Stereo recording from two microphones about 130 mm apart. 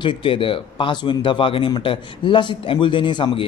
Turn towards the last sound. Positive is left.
turn(degrees=40)  # may be behind; listen again after turning